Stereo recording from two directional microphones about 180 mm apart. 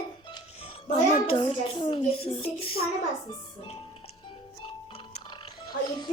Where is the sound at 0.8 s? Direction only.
40° left (ahead or behind).